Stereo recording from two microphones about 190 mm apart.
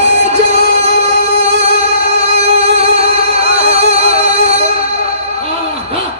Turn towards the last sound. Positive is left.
turn(degrees=-30)  # may be behind; listen again after turning